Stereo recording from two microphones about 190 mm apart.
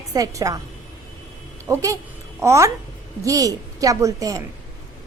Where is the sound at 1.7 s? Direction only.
15° right (ahead or behind).